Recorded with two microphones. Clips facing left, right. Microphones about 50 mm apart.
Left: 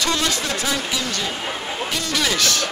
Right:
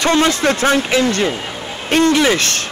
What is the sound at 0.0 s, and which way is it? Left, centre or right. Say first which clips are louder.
A man's voice: right 8 dB; right.